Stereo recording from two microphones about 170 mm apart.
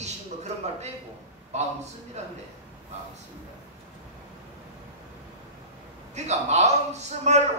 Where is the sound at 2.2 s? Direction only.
40° right (ahead or behind).